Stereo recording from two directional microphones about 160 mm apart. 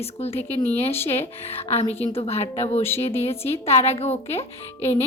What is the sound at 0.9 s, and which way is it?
Speech, 15° left (ahead or behind).